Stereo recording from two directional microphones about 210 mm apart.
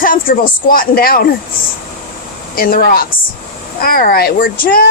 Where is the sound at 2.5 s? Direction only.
45° left (ahead or behind).